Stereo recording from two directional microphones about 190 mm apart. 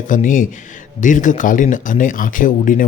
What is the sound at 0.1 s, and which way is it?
Speech, 45° left (ahead or behind).